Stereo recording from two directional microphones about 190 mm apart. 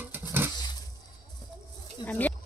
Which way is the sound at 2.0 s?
10° left (ahead or behind).